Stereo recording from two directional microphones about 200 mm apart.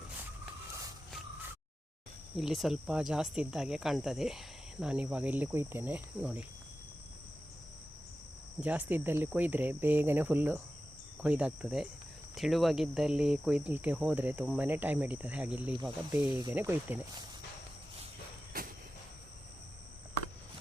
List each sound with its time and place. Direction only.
2.3 s speech: centre (ahead or behind)
8.6 s speech: 10° right (ahead or behind)
18.5 s vehicle: 45° right (ahead or behind)